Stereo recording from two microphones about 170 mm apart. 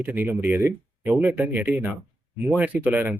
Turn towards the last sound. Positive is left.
turn(degrees=-10)  # may be behind; listen again after turning